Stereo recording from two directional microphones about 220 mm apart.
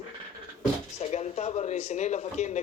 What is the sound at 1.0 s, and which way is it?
Speech, 30° left (ahead or behind).